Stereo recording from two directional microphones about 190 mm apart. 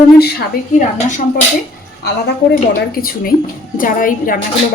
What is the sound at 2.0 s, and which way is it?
A woman's voice, 55° left (ahead or behind).